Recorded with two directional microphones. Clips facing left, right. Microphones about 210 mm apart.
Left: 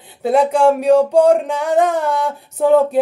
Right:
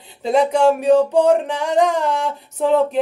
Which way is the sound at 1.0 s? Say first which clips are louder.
Left 2 dB; 10° left (ahead or behind).